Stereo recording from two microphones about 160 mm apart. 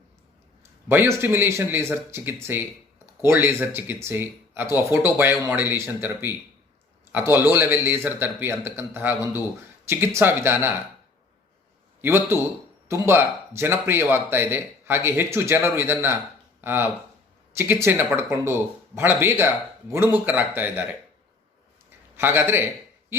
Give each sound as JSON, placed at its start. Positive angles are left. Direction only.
{"t": 0.9, "sound": "speech", "side_deg": -15}
{"t": 12.0, "sound": "speech", "side_deg": -15}
{"t": 22.1, "sound": "a man's voice", "side_deg": -15}